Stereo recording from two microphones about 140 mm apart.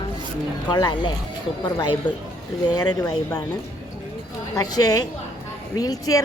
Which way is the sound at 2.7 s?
25° left (ahead or behind).